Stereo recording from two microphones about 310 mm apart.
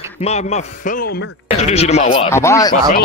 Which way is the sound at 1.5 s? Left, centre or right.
Left.